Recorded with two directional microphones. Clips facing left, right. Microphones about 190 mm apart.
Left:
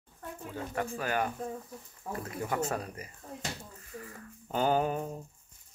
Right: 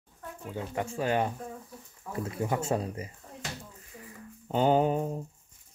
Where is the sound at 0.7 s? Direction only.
25° right (ahead or behind).